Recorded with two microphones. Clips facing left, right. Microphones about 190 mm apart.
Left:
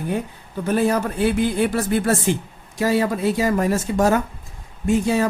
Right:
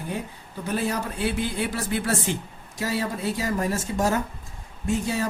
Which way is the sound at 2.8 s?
60° left (ahead or behind).